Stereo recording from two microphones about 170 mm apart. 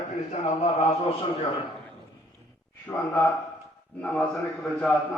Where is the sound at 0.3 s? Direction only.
40° left (ahead or behind).